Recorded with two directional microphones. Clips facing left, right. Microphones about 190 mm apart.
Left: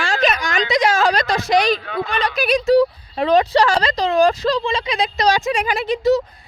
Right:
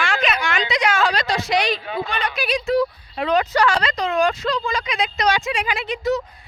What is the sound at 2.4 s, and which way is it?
Speech, 50° left (ahead or behind).